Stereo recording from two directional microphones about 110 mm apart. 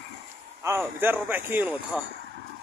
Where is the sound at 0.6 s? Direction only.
25° right (ahead or behind).